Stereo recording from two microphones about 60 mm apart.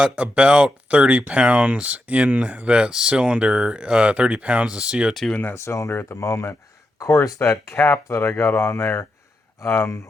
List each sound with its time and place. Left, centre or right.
0.0 s speech: centre
5.3 s speech: left
5.5 s speech: left
5.9 s speech: left
6.1 s speech: left